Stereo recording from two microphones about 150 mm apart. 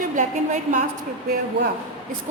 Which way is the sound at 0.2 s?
55° right (ahead or behind).